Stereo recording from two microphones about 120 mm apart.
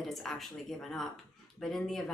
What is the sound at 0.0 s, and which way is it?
A woman's voice, centre (ahead or behind).